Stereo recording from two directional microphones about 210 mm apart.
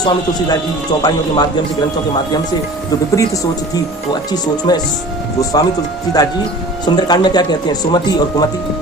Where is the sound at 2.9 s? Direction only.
15° left (ahead or behind).